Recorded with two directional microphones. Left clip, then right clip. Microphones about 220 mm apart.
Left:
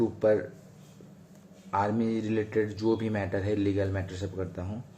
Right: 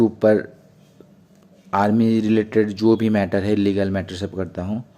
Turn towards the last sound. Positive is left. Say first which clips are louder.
# right 9 dB
turn(degrees=-45)  # may be behind; listen again after turning